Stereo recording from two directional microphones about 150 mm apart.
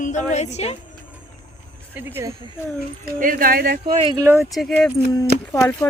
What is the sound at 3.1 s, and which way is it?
Speech, 65° right (ahead or behind).